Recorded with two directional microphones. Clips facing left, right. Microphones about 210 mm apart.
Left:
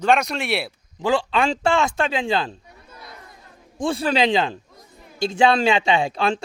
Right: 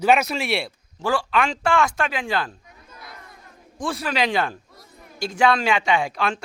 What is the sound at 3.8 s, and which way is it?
A man's voice, 25° left (ahead or behind).